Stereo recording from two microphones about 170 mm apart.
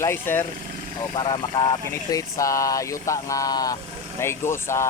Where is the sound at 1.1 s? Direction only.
25° left (ahead or behind).